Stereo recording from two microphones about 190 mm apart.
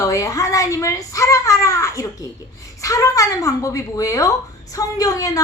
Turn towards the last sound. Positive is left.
turn(degrees=15)  # may be behind; listen again after turning